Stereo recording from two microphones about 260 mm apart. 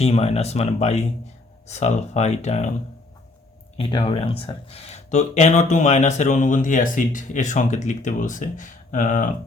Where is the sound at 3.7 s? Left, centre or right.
Left.